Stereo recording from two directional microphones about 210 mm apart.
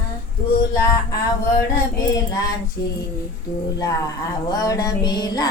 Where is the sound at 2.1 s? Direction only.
15° left (ahead or behind).